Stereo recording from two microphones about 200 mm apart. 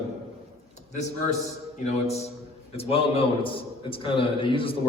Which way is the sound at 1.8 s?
35° left (ahead or behind).